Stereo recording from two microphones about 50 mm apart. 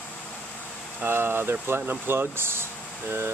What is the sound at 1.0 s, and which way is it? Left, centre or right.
Speech, right.